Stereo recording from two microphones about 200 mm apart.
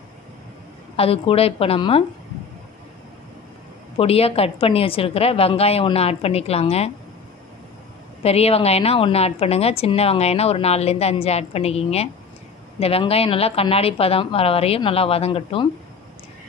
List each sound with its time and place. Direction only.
0.9 s a woman's voice: 30° left (ahead or behind)
3.9 s a woman's voice: 30° left (ahead or behind)
8.2 s a woman's voice: 30° left (ahead or behind)